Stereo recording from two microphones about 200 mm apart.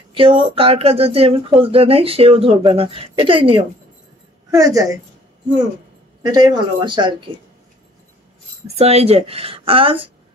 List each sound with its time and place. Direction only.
0.1 s a woman's voice: 25° right (ahead or behind)
6.2 s speech: 20° right (ahead or behind)
8.6 s speech: 30° right (ahead or behind)